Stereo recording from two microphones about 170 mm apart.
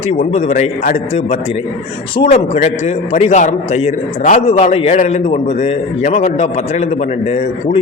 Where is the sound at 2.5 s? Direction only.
45° left (ahead or behind).